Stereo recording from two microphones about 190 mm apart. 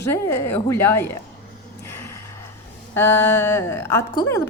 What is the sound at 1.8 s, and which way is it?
Gasp, 15° left (ahead or behind).